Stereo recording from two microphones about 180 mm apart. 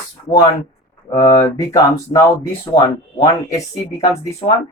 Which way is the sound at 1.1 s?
20° left (ahead or behind).